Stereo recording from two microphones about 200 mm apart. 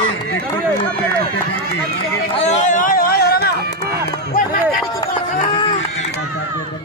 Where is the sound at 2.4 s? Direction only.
35° left (ahead or behind).